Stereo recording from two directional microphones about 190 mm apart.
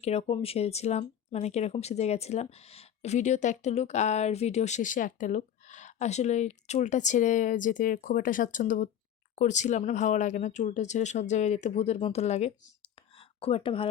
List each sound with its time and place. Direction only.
0.0 s speech: 35° left (ahead or behind)